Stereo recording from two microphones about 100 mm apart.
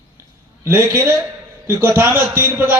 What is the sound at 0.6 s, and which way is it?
A man's voice, 25° right (ahead or behind).